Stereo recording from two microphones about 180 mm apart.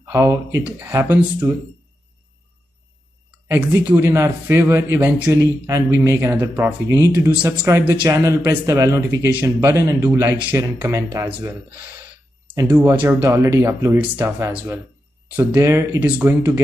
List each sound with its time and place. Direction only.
0.0 s speech: 15° right (ahead or behind)
3.4 s speech: 10° right (ahead or behind)
12.5 s speech: 10° right (ahead or behind)